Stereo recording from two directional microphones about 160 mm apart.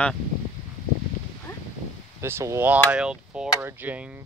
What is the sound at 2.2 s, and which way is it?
Speech, 15° right (ahead or behind).